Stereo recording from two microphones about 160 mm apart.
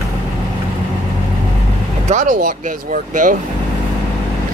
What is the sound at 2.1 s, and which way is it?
Speech, 50° right (ahead or behind).